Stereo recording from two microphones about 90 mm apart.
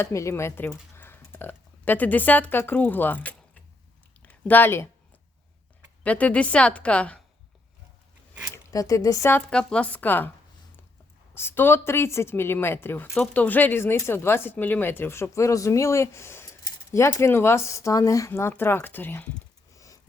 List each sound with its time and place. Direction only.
0.0 s speech: 35° left (ahead or behind)
6.0 s a woman's voice: 15° left (ahead or behind)
8.5 s speech: 40° left (ahead or behind)
9.5 s a woman's voice: 10° left (ahead or behind)
11.3 s speech: 25° left (ahead or behind)
18.3 s speech: 25° left (ahead or behind)
19.7 s a sound: 40° left (ahead or behind)